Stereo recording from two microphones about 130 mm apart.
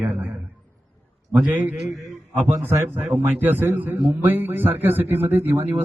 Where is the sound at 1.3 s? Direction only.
10° right (ahead or behind).